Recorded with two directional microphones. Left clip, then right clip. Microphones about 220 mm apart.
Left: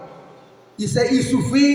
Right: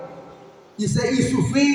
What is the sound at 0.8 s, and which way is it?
Speech, 40° left (ahead or behind).